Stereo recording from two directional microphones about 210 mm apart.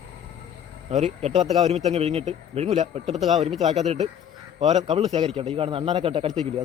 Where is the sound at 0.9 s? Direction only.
30° right (ahead or behind).